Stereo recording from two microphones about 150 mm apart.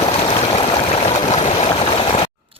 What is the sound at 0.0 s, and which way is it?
Stream, 40° left (ahead or behind).